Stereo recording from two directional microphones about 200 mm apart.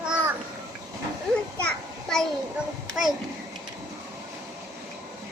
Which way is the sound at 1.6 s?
5° left (ahead or behind).